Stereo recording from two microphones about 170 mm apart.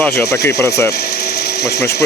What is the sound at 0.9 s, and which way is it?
Power tool, 65° left (ahead or behind).